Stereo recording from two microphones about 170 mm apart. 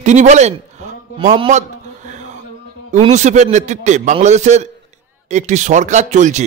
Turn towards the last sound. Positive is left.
turn(degrees=-45)  # may be behind; listen again after turning